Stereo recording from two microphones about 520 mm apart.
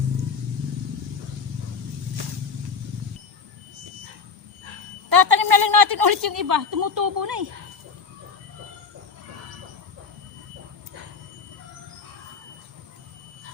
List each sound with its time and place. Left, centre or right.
5.0 s a woman's voice: right